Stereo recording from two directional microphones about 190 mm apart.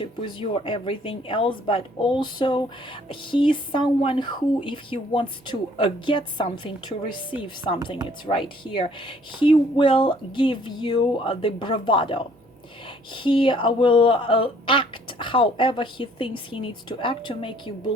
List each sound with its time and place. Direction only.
0.0 s speech: 25° left (ahead or behind)